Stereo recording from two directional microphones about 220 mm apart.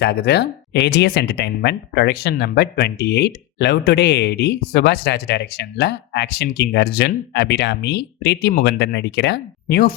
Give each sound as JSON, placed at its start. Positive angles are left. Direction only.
{"t": 0.0, "sound": "speech", "side_deg": 50}